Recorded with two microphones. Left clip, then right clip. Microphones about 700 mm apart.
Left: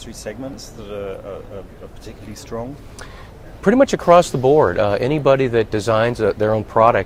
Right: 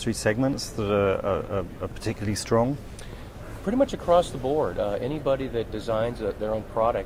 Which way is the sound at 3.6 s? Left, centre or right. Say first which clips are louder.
Left 10 dB; left.